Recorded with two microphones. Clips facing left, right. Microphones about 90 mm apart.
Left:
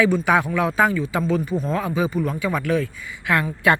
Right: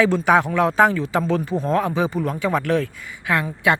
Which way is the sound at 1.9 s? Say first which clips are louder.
Right 1 dB; 30° right (ahead or behind).